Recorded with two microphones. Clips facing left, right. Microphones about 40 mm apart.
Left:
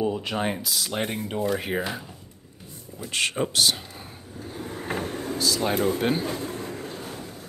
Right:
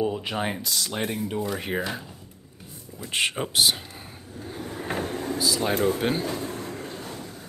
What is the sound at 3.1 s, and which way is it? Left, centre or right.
Speech, centre.